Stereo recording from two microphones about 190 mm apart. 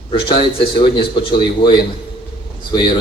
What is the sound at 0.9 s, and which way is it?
Speech, 25° left (ahead or behind).